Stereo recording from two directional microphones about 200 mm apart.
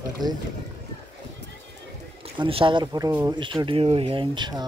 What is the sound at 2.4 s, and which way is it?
Speech, 25° right (ahead or behind).